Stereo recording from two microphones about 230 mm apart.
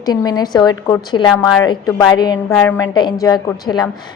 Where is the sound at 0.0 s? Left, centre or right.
Centre.